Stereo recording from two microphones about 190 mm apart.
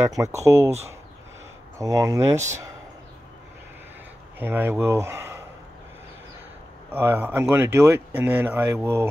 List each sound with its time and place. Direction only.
0.2 s speech: 15° right (ahead or behind)
1.8 s speech: 15° right (ahead or behind)
4.4 s speech: 10° right (ahead or behind)
6.9 s speech: 10° right (ahead or behind)